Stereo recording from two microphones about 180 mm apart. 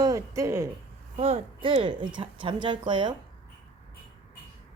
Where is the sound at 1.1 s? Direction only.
30° right (ahead or behind).